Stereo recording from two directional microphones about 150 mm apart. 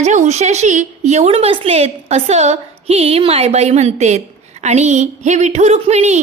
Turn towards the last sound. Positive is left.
turn(degrees=-50)  # may be behind; listen again after turning